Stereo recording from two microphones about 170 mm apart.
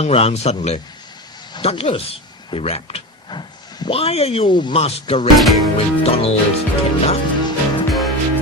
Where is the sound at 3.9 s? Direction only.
35° left (ahead or behind).